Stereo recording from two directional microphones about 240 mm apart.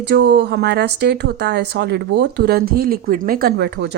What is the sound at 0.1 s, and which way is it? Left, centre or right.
Speech, right.